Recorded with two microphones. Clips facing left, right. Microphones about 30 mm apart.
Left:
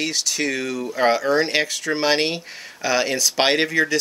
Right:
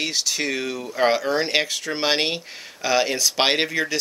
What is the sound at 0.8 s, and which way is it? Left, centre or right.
Speech, centre.